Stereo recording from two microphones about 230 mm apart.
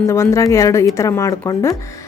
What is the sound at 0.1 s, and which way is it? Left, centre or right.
A woman's voice, centre.